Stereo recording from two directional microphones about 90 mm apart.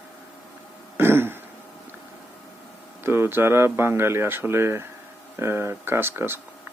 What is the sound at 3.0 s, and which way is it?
Speech, 25° right (ahead or behind).